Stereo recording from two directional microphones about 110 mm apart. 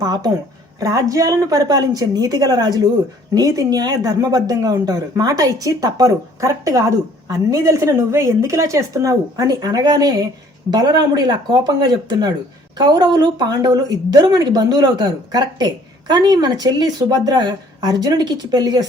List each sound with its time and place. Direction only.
0.0 s speech: 35° right (ahead or behind)